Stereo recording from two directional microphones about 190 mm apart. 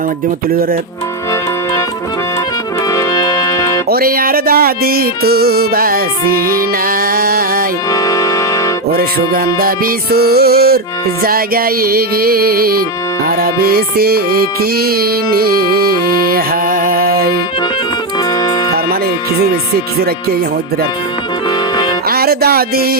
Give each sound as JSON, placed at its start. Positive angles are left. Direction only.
{"t": 2.9, "sound": "music", "side_deg": 20}
{"t": 3.8, "sound": "music", "side_deg": -50}
{"t": 7.9, "sound": "music", "side_deg": 20}
{"t": 8.9, "sound": "music", "side_deg": -50}
{"t": 22.1, "sound": "music", "side_deg": -55}